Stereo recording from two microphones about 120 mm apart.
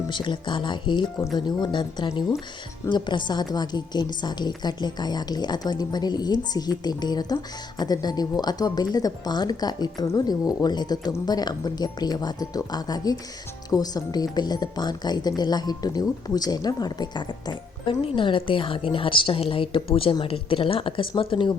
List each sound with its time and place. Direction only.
0.1 s speech: 40° left (ahead or behind)